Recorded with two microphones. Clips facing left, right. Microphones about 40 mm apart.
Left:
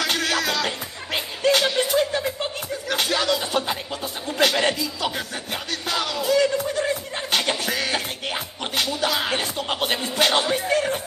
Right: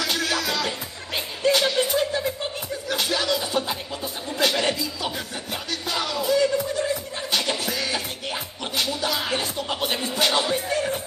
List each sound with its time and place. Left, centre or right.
0.0 s music: left
2.9 s a sound: left
4.4 s music: left